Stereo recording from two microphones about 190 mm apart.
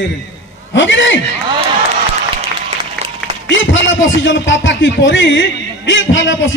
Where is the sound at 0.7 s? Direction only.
75° left (ahead or behind).